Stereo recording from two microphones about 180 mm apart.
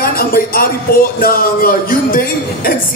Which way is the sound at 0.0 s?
55° left (ahead or behind).